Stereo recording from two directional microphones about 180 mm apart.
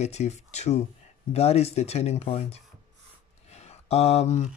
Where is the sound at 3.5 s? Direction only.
35° left (ahead or behind).